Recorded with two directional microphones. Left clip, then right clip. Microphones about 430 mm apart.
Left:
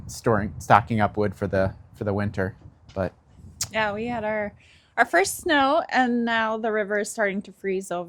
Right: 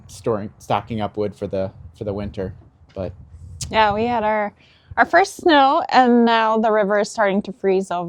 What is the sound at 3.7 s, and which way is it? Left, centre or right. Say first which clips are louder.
A woman's voice: right 9 dB; right.